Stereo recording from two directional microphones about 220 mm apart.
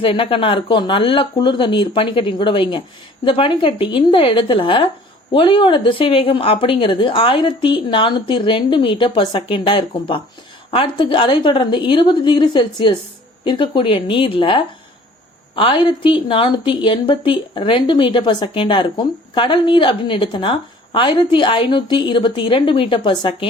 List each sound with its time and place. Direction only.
0.0 s a woman's voice: 25° left (ahead or behind)